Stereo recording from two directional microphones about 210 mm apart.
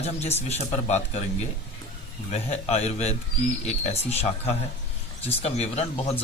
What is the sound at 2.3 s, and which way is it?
A man's voice, 30° left (ahead or behind).